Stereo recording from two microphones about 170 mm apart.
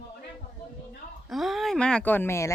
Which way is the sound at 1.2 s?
Centre (ahead or behind).